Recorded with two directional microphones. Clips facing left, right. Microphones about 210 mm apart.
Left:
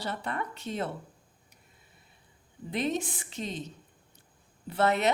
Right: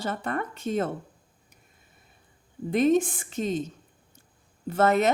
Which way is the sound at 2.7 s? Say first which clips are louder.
Right 9 dB; 50° right (ahead or behind).